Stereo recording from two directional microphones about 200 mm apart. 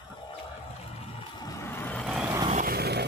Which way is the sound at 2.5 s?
45° right (ahead or behind).